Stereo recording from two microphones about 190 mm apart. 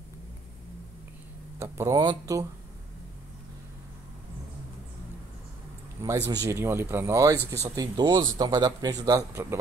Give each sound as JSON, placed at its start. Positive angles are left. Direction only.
{"t": 1.8, "sound": "speech", "side_deg": -20}
{"t": 6.0, "sound": "speech", "side_deg": -15}